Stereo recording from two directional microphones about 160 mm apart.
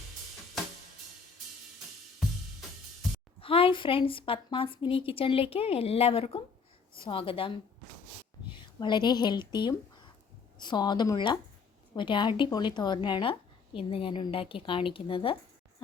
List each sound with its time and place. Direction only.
3.4 s a woman's voice: 35° left (ahead or behind)